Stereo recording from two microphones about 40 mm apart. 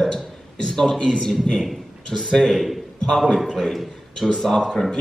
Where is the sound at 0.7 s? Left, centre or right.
Centre.